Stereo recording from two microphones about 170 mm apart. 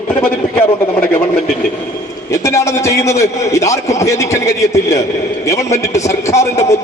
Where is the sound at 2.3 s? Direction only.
20° left (ahead or behind).